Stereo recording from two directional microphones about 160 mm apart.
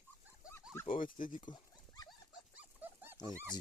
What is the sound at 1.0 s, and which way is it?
Speech, 60° left (ahead or behind).